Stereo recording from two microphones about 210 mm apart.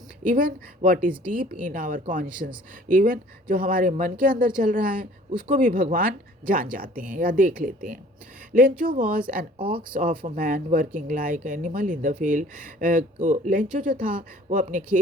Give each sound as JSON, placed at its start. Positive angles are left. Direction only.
{"t": 0.3, "sound": "speech", "side_deg": -40}
{"t": 9.0, "sound": "speech", "side_deg": -40}
{"t": 9.6, "sound": "speech", "side_deg": -25}
{"t": 9.9, "sound": "speech", "side_deg": -40}